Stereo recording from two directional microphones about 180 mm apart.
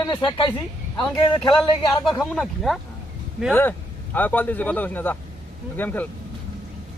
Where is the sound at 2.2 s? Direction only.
Centre (ahead or behind).